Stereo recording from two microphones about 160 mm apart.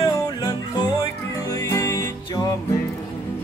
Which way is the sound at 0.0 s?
25° left (ahead or behind).